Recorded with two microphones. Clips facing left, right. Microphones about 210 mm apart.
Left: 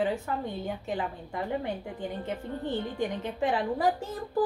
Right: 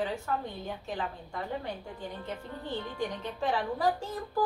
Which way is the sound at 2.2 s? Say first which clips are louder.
Left 5 dB; 20° left (ahead or behind).